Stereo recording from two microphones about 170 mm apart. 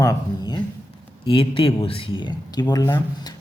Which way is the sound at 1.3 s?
30° left (ahead or behind).